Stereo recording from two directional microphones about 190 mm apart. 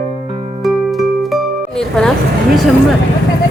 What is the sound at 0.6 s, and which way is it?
Music, centre (ahead or behind).